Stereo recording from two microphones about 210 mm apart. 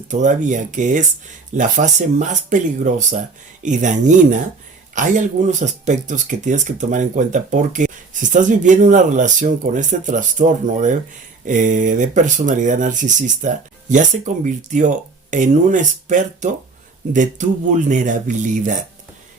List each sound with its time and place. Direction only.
0.1 s speech: 35° right (ahead or behind)